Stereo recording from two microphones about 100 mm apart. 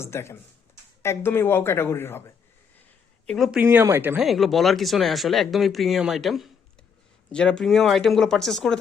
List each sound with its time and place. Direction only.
0.0 s speech: 25° left (ahead or behind)
3.2 s speech: centre (ahead or behind)
3.6 s speech: 20° right (ahead or behind)
4.2 s speech: centre (ahead or behind)